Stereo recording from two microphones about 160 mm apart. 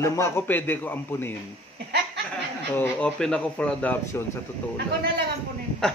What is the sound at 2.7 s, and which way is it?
A man's voice, 10° left (ahead or behind).